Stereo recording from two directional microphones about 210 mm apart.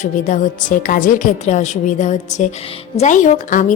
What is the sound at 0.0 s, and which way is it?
A woman's voice, 40° left (ahead or behind).